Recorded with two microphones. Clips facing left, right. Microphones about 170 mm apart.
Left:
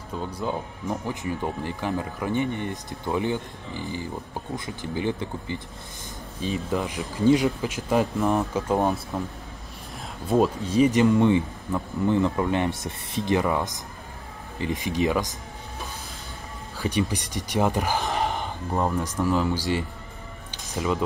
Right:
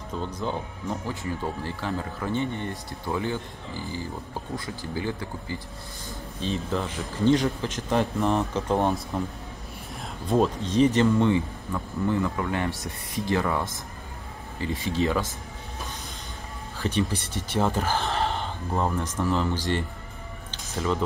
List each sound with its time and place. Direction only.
0.2 s speech: 10° left (ahead or behind)
10.3 s speech: 5° left (ahead or behind)
16.7 s speech: 10° left (ahead or behind)
18.7 s speech: centre (ahead or behind)